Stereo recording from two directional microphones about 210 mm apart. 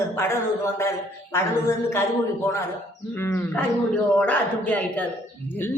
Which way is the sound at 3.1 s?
10° left (ahead or behind).